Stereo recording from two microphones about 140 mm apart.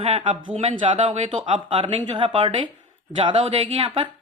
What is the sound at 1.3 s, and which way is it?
Speech, 40° right (ahead or behind).